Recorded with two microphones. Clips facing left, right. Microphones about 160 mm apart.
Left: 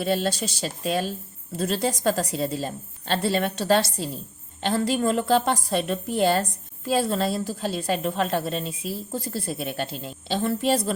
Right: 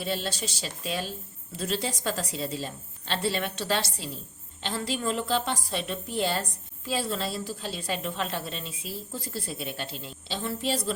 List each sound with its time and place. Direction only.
0.0 s a woman's voice: 50° left (ahead or behind)